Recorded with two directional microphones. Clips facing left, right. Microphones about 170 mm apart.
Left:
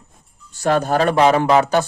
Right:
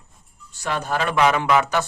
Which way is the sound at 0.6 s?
40° left (ahead or behind).